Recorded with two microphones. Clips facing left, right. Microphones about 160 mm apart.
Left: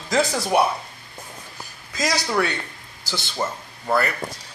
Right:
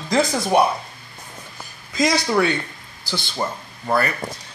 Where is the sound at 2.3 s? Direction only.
5° right (ahead or behind).